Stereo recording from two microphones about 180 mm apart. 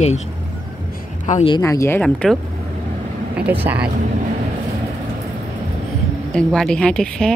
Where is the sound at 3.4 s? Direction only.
10° right (ahead or behind).